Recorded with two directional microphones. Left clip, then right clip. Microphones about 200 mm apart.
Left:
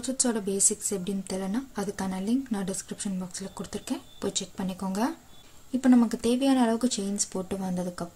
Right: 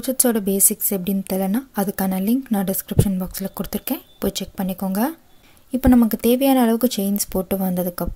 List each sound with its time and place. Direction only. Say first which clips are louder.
0.0 s a woman's voice: right 8 dB; 40° right (ahead or behind)